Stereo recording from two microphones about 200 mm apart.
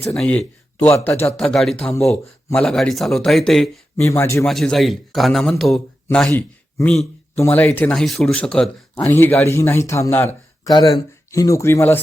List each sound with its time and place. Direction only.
0.1 s speech: 5° left (ahead or behind)
2.0 s speech: 15° left (ahead or behind)
2.6 s speech: 5° left (ahead or behind)
3.9 s speech: 15° left (ahead or behind)
4.4 s speech: centre (ahead or behind)